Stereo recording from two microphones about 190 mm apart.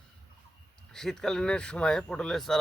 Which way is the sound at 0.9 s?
5° left (ahead or behind).